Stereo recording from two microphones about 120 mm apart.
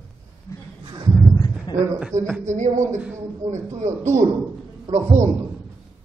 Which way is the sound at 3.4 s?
80° right.